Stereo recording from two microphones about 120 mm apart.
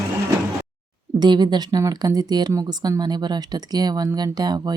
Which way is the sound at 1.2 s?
35° right (ahead or behind).